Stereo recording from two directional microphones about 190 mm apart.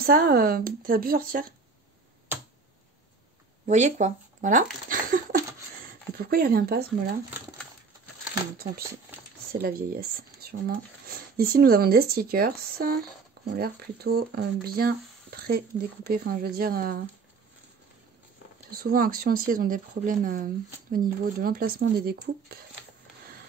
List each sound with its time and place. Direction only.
0.0 s speech: 50° right (ahead or behind)
3.6 s speech: 40° right (ahead or behind)
9.5 s speech: 50° right (ahead or behind)
18.7 s speech: 50° right (ahead or behind)